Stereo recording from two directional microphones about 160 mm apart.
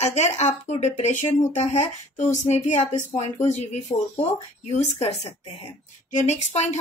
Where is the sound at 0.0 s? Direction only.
45° left (ahead or behind).